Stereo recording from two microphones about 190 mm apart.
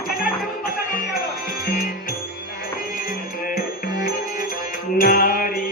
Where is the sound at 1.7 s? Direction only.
50° left (ahead or behind).